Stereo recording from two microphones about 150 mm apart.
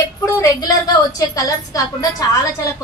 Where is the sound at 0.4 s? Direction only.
25° left (ahead or behind).